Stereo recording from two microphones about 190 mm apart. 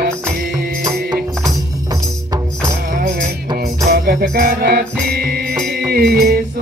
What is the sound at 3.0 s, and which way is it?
Music, 45° right (ahead or behind).